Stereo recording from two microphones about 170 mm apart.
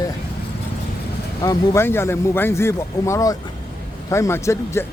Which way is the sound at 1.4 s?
15° left (ahead or behind).